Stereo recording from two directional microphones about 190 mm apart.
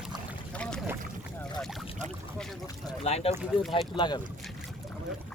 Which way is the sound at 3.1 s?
35° left (ahead or behind).